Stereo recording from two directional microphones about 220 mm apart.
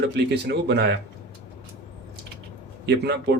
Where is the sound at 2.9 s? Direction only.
50° right (ahead or behind).